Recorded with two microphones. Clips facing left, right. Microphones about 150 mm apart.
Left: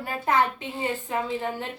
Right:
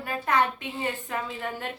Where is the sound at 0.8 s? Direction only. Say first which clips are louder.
Left 3 dB; 30° left (ahead or behind).